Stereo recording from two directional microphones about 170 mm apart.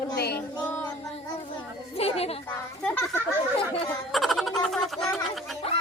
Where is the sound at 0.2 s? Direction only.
70° left (ahead or behind).